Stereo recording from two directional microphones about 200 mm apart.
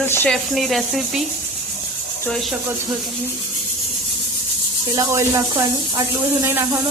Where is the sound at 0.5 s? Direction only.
Centre (ahead or behind).